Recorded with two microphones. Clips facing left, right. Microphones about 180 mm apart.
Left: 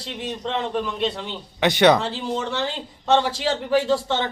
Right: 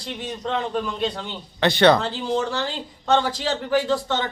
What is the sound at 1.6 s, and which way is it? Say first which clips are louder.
Speech: even; 15° left (ahead or behind).